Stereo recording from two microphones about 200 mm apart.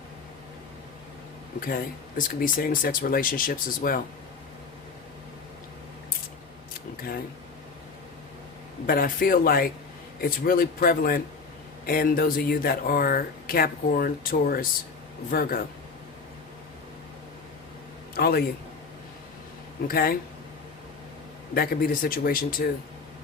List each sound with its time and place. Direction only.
1.6 s speech: 45° left (ahead or behind)
8.9 s speech: 45° left (ahead or behind)
18.2 s speech: 50° left (ahead or behind)
19.9 s speech: 50° left (ahead or behind)
21.5 s speech: 50° left (ahead or behind)